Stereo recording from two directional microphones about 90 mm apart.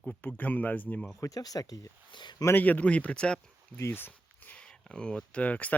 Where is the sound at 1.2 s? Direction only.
40° left (ahead or behind).